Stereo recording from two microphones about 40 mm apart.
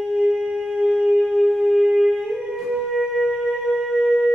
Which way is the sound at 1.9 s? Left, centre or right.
Centre.